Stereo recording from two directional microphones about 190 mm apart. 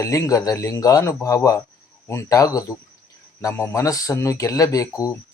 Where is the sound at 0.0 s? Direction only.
15° left (ahead or behind).